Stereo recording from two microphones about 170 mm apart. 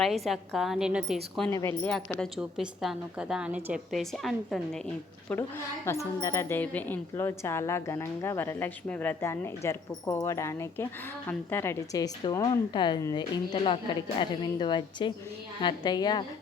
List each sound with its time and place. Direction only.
0.0 s a woman's voice: centre (ahead or behind)
1.5 s a woman's voice: 20° left (ahead or behind)
2.0 s a woman's voice: 5° left (ahead or behind)
5.3 s a woman's voice: 15° left (ahead or behind)